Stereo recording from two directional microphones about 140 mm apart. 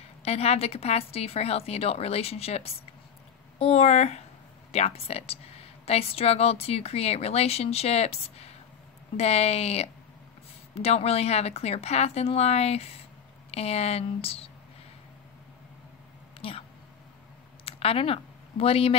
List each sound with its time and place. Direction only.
0.2 s a woman's voice: 50° left (ahead or behind)
16.3 s a sound: 45° left (ahead or behind)
17.6 s speech: 45° left (ahead or behind)